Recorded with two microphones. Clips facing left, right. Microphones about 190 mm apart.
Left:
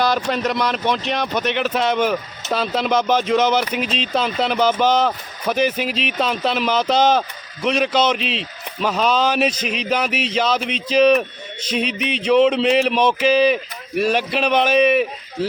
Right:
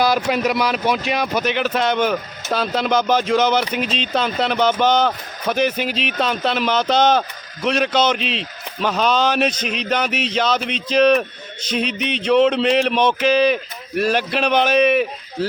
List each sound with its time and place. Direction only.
0.0 s speech: 5° right (ahead or behind)